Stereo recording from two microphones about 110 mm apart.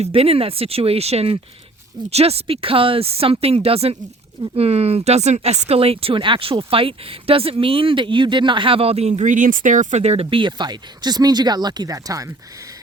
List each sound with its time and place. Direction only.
0.0 s speech: 65° right (ahead or behind)
10.2 s speech: 50° right (ahead or behind); by 12.6 s 30° right (ahead or behind)